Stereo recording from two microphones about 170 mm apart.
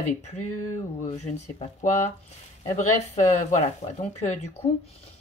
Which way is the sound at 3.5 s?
40° left (ahead or behind).